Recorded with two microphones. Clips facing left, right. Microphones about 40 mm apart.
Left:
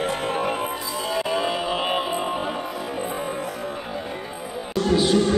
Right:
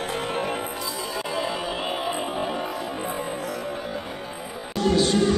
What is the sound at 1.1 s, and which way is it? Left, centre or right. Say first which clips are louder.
Music: left 5 dB; left.